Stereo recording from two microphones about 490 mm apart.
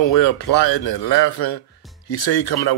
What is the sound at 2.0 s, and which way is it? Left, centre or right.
Speech, left.